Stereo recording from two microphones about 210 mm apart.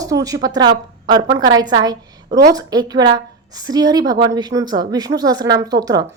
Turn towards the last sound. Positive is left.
turn(degrees=-20)  # may be behind; listen again after turning